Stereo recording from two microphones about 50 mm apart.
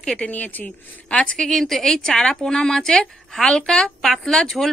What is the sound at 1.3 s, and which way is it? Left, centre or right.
Speech, centre.